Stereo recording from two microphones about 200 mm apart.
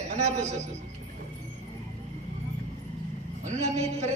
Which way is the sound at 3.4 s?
35° right (ahead or behind).